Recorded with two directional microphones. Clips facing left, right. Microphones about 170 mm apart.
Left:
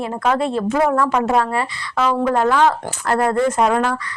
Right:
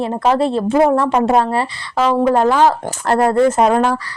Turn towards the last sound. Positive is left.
turn(degrees=-35)  # may be behind; listen again after turning